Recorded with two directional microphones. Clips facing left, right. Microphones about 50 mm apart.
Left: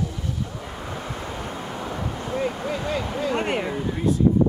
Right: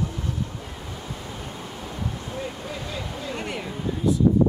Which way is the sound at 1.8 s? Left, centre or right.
Left.